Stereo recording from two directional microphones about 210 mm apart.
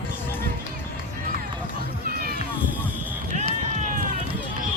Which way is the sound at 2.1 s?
45° right (ahead or behind).